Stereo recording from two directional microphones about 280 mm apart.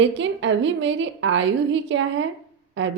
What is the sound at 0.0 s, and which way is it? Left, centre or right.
A woman's voice, right.